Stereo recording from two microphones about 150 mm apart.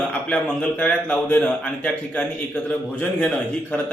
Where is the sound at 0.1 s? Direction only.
10° left (ahead or behind).